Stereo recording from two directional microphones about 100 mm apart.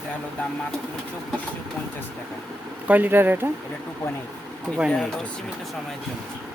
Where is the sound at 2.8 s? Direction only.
15° right (ahead or behind).